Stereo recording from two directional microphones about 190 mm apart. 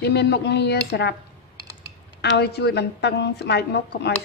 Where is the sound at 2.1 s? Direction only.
60° left (ahead or behind).